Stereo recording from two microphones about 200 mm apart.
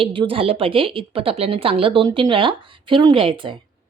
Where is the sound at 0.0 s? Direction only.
25° right (ahead or behind).